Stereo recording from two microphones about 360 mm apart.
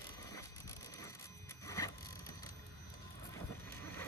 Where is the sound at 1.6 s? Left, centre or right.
Centre.